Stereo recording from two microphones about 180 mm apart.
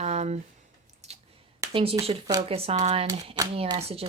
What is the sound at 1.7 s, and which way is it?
Speech, 30° right (ahead or behind).